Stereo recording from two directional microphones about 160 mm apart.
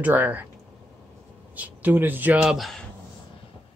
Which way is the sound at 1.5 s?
10° right (ahead or behind).